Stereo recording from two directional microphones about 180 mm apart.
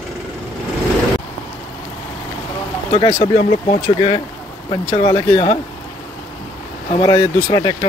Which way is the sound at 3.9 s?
30° left (ahead or behind).